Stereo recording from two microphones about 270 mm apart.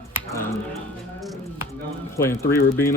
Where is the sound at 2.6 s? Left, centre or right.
Left.